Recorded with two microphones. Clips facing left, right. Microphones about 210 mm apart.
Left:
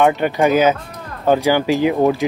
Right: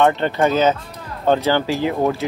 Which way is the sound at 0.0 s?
10° left (ahead or behind).